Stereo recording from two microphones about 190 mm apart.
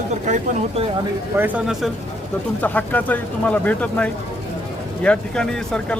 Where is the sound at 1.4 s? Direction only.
Centre (ahead or behind).